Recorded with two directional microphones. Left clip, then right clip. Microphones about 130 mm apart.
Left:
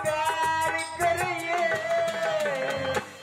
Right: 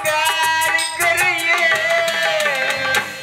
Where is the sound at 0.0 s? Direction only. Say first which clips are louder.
Right 8 dB; 20° right (ahead or behind).